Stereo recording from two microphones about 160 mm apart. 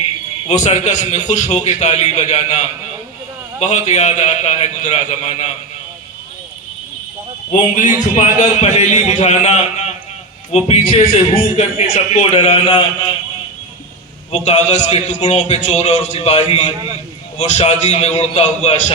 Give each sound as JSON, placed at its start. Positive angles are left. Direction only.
{"t": 0.4, "sound": "a man's voice", "side_deg": 45}
{"t": 7.8, "sound": "a man's voice", "side_deg": 50}
{"t": 14.3, "sound": "a man's voice", "side_deg": 45}